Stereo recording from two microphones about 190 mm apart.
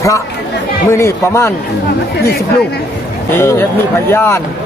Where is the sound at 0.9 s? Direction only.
15° left (ahead or behind).